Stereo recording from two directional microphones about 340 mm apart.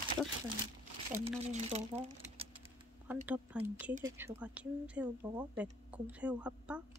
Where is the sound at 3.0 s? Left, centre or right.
Centre.